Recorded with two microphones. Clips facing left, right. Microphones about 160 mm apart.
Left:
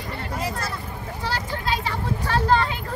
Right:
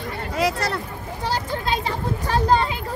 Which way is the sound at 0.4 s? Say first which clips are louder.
Right 9 dB; 75° right (ahead or behind).